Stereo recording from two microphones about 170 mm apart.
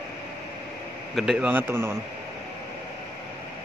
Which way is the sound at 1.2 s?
5° right (ahead or behind).